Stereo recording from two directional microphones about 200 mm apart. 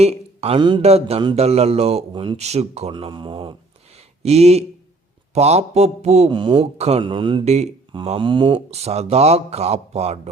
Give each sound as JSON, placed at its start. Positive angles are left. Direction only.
{"t": 0.0, "sound": "a man's voice", "side_deg": -30}